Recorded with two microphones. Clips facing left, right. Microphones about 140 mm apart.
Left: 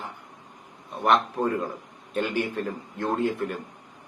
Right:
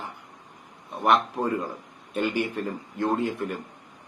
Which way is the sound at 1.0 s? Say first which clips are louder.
Even; 5° right (ahead or behind).